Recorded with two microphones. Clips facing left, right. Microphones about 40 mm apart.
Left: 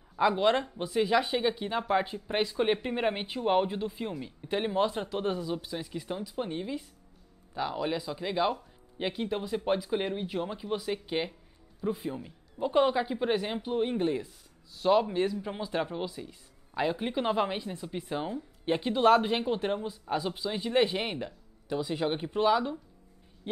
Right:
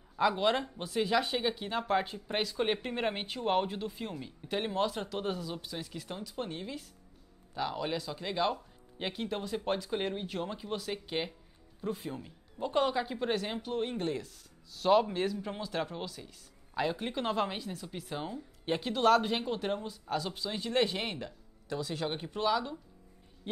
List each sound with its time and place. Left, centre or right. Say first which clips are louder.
0.1 s speech: left 3 dB; centre
23.5 s speech: left 4 dB; centre